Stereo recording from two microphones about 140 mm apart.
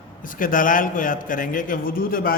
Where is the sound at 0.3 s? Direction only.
75° left (ahead or behind).